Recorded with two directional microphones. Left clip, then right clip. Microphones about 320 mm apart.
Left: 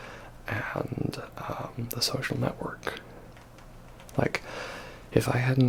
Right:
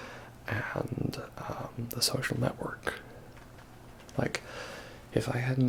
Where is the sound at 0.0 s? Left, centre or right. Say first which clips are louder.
Left 2 dB; centre.